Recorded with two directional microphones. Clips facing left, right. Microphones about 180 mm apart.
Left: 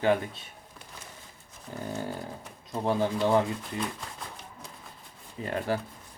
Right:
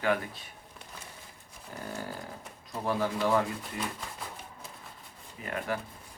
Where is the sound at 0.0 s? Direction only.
25° left (ahead or behind).